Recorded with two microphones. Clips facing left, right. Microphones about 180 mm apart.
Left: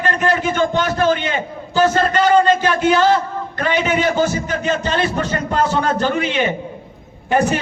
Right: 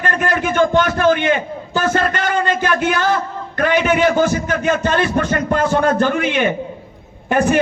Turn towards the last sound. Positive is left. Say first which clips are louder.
# right 1 dB
turn(degrees=-50)  # may be behind; listen again after turning